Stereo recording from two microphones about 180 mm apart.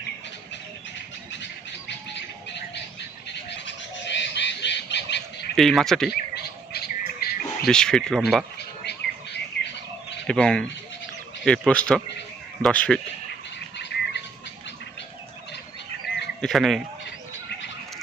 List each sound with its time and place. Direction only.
3.7 s squawk: 75° left (ahead or behind)
5.5 s speech: centre (ahead or behind)
6.1 s a sound: 60° left (ahead or behind)
7.6 s speech: 5° left (ahead or behind)
8.5 s bird: 65° left (ahead or behind)
10.2 s speech: 5° left (ahead or behind)
13.7 s bird: 75° left (ahead or behind)
16.4 s speech: centre (ahead or behind)